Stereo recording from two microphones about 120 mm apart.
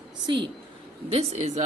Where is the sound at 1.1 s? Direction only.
60° right (ahead or behind).